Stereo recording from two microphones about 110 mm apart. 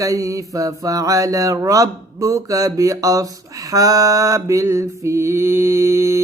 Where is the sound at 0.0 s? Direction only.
30° right (ahead or behind).